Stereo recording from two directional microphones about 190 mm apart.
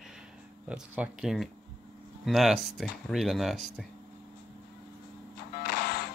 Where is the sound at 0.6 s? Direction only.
5° right (ahead or behind).